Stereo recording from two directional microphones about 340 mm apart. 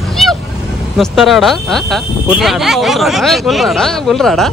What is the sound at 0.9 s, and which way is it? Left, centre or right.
Speech, centre.